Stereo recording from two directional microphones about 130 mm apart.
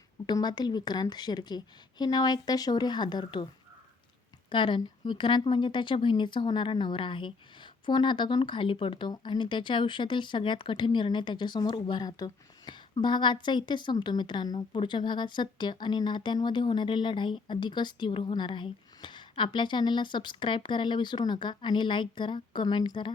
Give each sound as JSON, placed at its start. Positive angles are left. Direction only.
{"t": 0.3, "sound": "speech", "side_deg": 35}